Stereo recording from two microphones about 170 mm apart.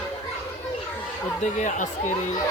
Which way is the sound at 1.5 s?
45° left (ahead or behind).